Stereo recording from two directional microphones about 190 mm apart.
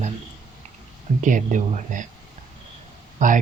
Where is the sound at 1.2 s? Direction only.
40° right (ahead or behind).